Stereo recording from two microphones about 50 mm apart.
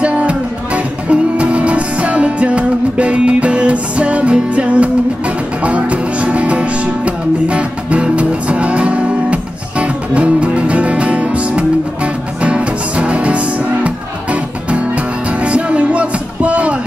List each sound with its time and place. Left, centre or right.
0.0 s music: right